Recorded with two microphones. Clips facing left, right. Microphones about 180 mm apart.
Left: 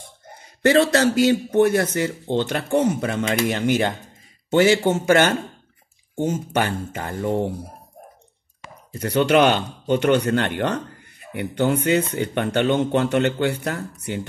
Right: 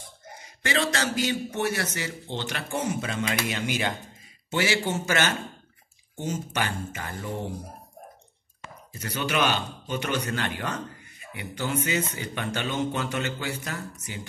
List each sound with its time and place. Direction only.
0.7 s speech: 55° left (ahead or behind)
8.9 s speech: 60° left (ahead or behind)